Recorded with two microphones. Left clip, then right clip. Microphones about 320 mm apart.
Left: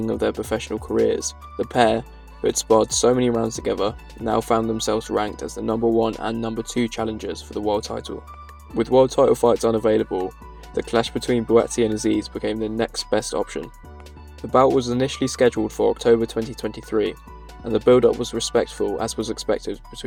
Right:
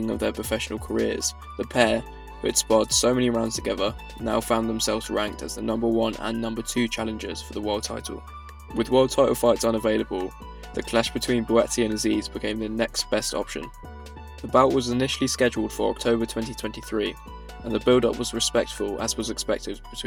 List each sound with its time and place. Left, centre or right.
0.0 s speech: right